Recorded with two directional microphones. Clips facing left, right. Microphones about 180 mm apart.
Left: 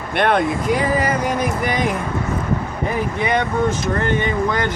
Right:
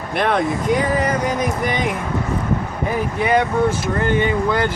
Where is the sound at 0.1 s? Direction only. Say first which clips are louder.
Left 1 dB; centre (ahead or behind).